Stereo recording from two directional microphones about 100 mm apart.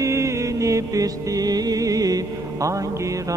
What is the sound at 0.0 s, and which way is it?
Music, 30° right (ahead or behind).